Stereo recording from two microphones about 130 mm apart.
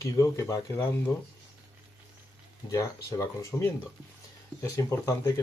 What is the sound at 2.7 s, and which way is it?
Speech, 25° left (ahead or behind).